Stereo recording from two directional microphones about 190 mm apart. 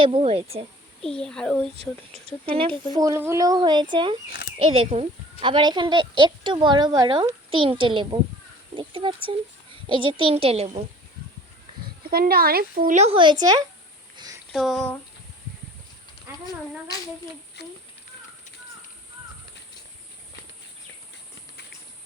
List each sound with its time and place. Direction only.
0.0 s speech: 30° right (ahead or behind)
1.0 s speech: 5° left (ahead or behind)
2.5 s a woman's voice: 25° right (ahead or behind)
4.3 s speech: 55° left (ahead or behind)
4.5 s a woman's voice: 30° right (ahead or behind)
12.1 s speech: 50° right (ahead or behind); by 13.7 s 20° right (ahead or behind)
14.2 s a sound: 25° right (ahead or behind)
14.5 s speech: centre (ahead or behind)
17.6 s speech: 60° left (ahead or behind)